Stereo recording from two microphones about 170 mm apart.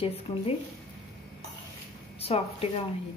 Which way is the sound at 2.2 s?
35° left (ahead or behind).